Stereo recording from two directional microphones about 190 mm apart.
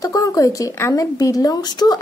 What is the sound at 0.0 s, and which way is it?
Speech, 20° left (ahead or behind).